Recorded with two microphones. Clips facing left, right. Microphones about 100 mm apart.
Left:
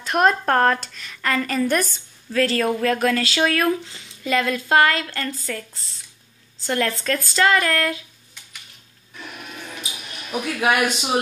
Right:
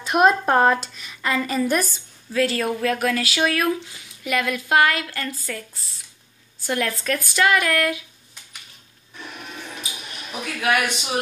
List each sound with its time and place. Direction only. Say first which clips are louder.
0.0 s speech: right 1 dB; 10° right (ahead or behind)
6.7 s speech: left 1 dB; 10° right (ahead or behind)
9.2 s a sound: even; centre (ahead or behind)
10.6 s a man's voice: left 1 dB; 25° left (ahead or behind)